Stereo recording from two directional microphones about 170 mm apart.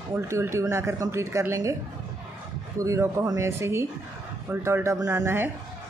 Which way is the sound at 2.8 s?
20° right (ahead or behind).